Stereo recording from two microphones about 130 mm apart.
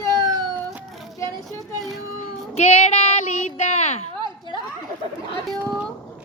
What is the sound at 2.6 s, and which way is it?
Child singing, 55° left (ahead or behind).